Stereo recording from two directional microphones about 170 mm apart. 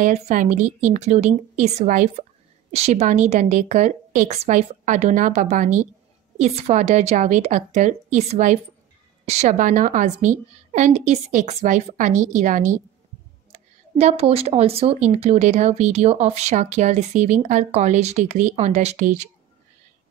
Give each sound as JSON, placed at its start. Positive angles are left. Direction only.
{"t": 0.0, "sound": "a woman's voice", "side_deg": -50}